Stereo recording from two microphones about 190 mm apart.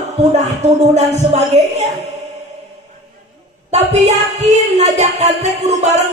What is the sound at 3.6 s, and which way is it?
Speech, 35° right (ahead or behind).